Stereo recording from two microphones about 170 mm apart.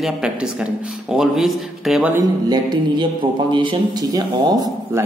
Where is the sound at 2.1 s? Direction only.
20° right (ahead or behind).